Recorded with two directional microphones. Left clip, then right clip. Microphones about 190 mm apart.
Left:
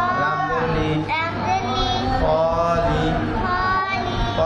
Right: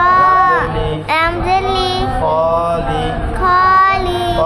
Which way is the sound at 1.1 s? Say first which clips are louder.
Right 11 dB; 50° right (ahead or behind).